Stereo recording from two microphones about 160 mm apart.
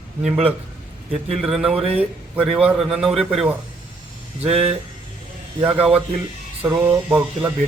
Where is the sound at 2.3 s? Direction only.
10° right (ahead or behind).